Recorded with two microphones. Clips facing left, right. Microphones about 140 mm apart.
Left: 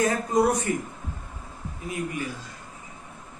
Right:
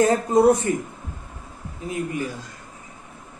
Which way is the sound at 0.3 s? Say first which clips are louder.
Right 6 dB; 30° right (ahead or behind).